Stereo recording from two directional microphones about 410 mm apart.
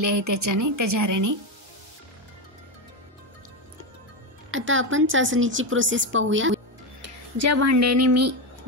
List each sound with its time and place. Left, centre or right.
0.0 s a woman's voice: right
4.5 s a woman's voice: right